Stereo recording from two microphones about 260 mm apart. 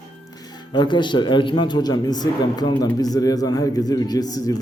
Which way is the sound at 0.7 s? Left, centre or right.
Centre.